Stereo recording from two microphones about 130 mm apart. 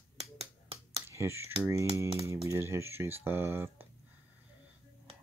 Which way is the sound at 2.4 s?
20° right (ahead or behind).